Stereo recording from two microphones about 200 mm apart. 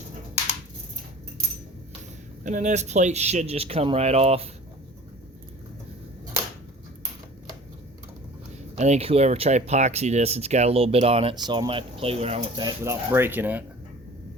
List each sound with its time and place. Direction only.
2.4 s speech: 40° right (ahead or behind)
8.7 s speech: 30° right (ahead or behind)
12.6 s speech: 15° right (ahead or behind)